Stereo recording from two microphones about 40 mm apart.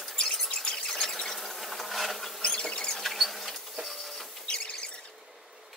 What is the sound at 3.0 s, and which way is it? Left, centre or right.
Insect, centre.